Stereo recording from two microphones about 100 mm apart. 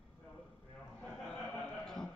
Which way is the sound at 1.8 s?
5° left (ahead or behind).